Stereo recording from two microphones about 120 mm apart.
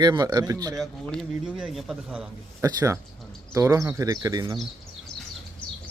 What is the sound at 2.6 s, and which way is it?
Speech, 30° right (ahead or behind).